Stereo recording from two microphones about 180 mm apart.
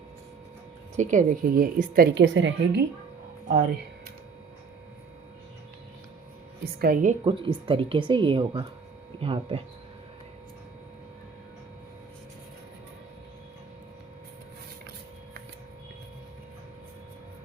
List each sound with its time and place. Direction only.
0.9 s a woman's voice: 50° right (ahead or behind)
2.2 s speech: 90° right
6.7 s a woman's voice: 55° right (ahead or behind)
7.3 s speech: 30° right (ahead or behind)